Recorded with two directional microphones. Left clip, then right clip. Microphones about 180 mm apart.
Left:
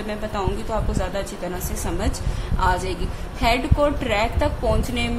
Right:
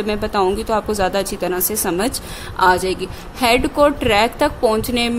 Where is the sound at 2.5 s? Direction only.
55° right (ahead or behind).